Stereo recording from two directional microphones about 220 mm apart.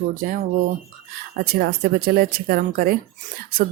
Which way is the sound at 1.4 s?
45° right (ahead or behind).